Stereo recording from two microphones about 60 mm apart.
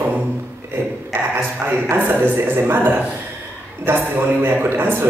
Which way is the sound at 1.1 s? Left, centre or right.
Right.